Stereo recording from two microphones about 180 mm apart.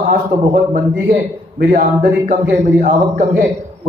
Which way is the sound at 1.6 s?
55° right (ahead or behind).